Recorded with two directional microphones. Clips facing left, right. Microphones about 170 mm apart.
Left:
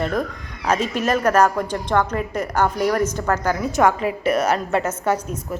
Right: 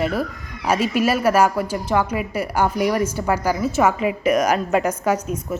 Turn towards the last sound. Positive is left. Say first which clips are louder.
# right 1 dB
turn(degrees=-10)  # may be behind; listen again after turning